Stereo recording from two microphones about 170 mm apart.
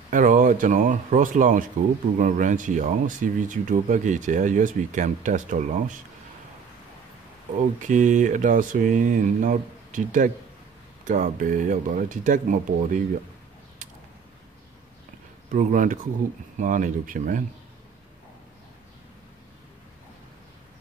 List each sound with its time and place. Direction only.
0.1 s speech: 50° right (ahead or behind)
7.8 s speech: 45° right (ahead or behind)
15.5 s speech: 50° right (ahead or behind)